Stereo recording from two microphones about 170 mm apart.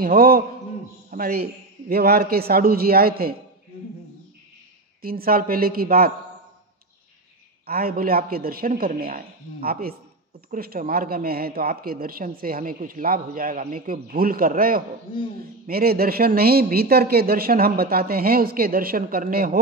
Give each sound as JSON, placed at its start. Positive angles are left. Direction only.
{"t": 0.0, "sound": "speech", "side_deg": -60}
{"t": 5.0, "sound": "speech", "side_deg": -60}
{"t": 7.6, "sound": "speech", "side_deg": -60}